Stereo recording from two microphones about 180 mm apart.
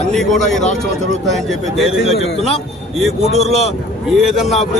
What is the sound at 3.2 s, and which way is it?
Speech, 35° left (ahead or behind).